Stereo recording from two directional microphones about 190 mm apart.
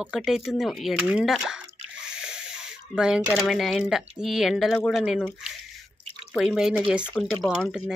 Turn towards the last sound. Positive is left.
turn(degrees=0)  # may be behind; listen again after turning